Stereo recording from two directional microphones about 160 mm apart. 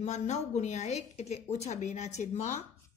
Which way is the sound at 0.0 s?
45° left (ahead or behind).